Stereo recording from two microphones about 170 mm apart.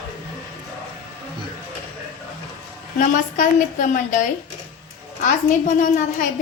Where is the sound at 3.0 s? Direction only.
50° left (ahead or behind).